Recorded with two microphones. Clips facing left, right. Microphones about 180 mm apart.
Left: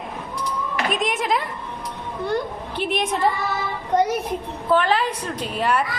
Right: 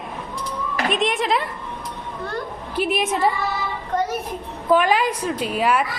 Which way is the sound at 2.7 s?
5° right (ahead or behind).